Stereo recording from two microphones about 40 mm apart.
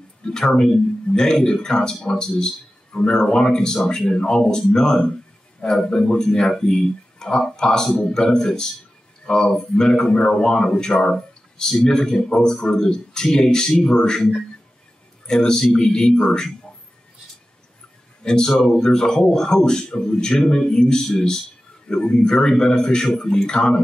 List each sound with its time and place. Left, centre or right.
0.2 s a sound: centre
0.6 s a man's voice: centre
18.2 s a man's voice: centre